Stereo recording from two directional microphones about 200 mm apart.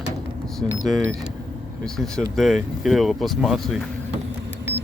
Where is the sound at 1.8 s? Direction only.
5° left (ahead or behind).